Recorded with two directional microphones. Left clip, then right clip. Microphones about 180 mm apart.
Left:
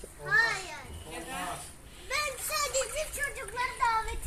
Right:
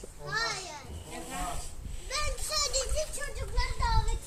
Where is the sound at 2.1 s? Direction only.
15° right (ahead or behind).